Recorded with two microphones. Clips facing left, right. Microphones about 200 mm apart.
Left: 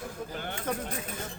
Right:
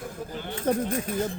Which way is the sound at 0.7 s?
35° right (ahead or behind).